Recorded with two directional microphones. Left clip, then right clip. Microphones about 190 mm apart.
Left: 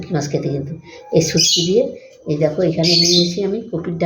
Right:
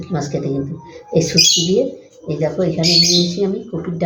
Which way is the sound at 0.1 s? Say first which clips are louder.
Even; 40° left (ahead or behind).